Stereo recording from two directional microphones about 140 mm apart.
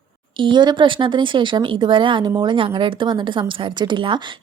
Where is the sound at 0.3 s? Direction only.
35° right (ahead or behind).